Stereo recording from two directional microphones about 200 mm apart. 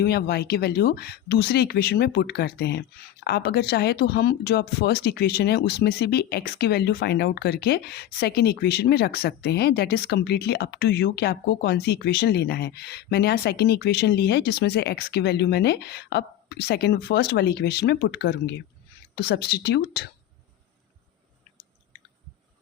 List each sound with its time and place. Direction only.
0.0 s speech: 55° left (ahead or behind)